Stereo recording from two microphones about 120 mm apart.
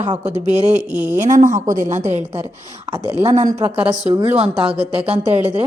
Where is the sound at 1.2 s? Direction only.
90° right.